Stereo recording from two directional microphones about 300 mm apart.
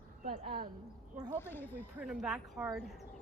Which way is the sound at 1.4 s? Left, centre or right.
Centre.